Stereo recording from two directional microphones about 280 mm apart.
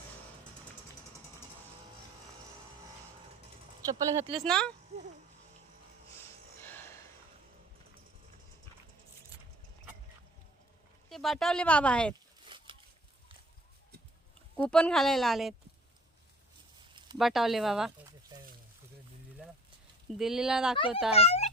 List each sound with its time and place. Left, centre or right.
3.8 s speech: centre
4.4 s speech: centre
6.1 s snort: centre
11.1 s speech: centre
12.5 s a sound: centre
14.5 s speech: centre
17.2 s speech: centre
20.1 s speech: centre
20.7 s a child's voice: centre